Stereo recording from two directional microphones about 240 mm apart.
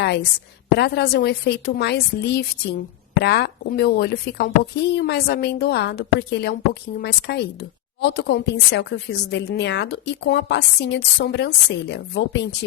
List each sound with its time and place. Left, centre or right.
0.0 s a woman's voice: left